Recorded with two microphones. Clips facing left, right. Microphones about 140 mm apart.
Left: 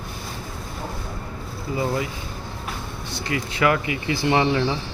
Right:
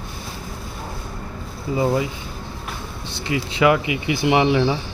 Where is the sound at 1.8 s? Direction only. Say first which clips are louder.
Right 5 dB; 20° right (ahead or behind).